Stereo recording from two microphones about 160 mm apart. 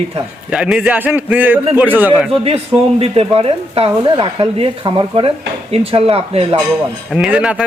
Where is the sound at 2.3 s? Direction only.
35° right (ahead or behind).